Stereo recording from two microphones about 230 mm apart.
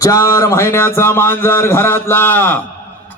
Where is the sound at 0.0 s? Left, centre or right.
Centre.